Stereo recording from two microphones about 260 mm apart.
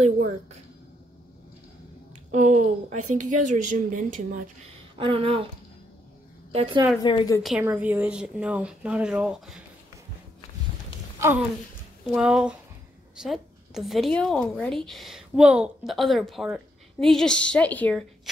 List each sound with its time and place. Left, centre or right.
2.3 s speech: right
3.1 s a woman's voice: right
3.4 s speech: right
4.9 s speech: centre
6.5 s speech: right
7.0 s a woman's voice: centre
7.4 s a woman's voice: centre
11.1 s a woman's voice: centre